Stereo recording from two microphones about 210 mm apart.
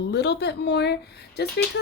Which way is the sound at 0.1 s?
55° left (ahead or behind).